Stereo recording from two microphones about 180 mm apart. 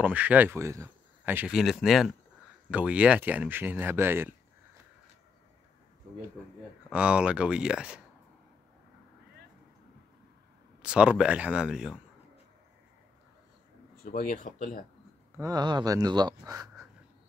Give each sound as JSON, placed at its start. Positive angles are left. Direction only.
{"t": 0.0, "sound": "speech", "side_deg": -10}
{"t": 6.9, "sound": "speech", "side_deg": -5}
{"t": 10.8, "sound": "speech", "side_deg": -5}
{"t": 14.0, "sound": "speech", "side_deg": 50}
{"t": 15.3, "sound": "speech", "side_deg": -20}